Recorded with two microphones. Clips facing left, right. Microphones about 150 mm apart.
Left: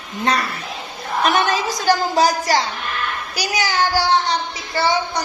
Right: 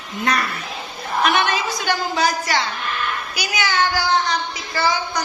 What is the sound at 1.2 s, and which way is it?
A child's voice, 40° left (ahead or behind).